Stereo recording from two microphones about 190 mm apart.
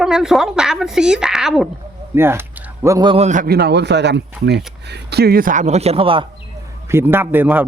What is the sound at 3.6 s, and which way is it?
Speech, 60° right (ahead or behind).